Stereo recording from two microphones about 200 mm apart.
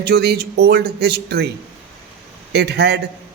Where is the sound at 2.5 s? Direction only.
55° right (ahead or behind).